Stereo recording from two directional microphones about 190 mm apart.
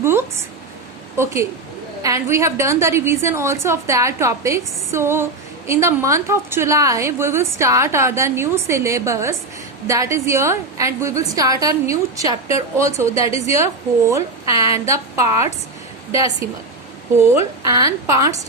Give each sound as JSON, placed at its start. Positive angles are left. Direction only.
{"t": 0.0, "sound": "a sound", "side_deg": -10}
{"t": 1.1, "sound": "a woman's voice", "side_deg": -15}
{"t": 17.7, "sound": "a woman's voice", "side_deg": -20}